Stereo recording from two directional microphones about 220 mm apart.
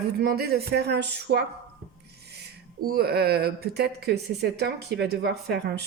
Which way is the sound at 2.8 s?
45° right (ahead or behind).